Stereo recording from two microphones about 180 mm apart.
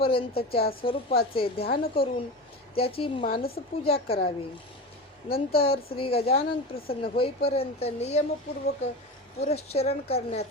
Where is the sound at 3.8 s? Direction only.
30° left (ahead or behind).